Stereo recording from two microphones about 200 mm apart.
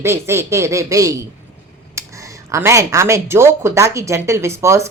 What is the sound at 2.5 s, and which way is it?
A woman's voice, 15° right (ahead or behind).